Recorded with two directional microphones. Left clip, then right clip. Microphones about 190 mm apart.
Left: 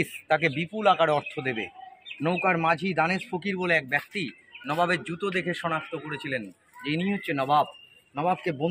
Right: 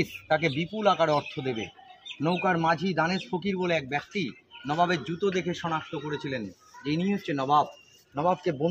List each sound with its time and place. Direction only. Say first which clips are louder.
0.0 s a man's voice: left 2 dB; 5° left (ahead or behind); by 7.6 s 40° left (ahead or behind)
8.1 s a man's voice: even; 50° left (ahead or behind)